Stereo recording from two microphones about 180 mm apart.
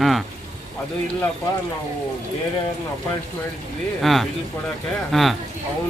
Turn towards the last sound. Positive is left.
turn(degrees=0)  # may be behind; listen again after turning